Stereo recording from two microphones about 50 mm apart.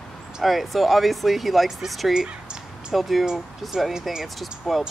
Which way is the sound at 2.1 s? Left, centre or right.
Centre.